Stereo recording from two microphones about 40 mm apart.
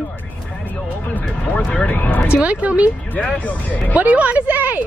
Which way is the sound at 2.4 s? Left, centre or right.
Right.